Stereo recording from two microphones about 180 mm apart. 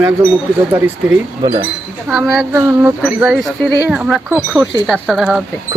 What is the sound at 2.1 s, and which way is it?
Speech, 5° right (ahead or behind).